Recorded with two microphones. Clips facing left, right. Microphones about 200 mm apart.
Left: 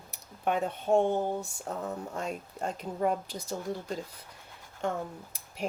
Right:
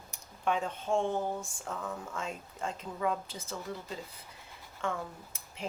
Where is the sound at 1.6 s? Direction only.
40° left (ahead or behind).